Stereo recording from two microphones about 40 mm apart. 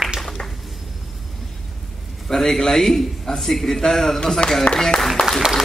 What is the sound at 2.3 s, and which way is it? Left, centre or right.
A man's voice, centre.